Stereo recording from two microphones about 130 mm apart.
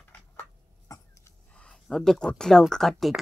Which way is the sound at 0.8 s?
25° left (ahead or behind).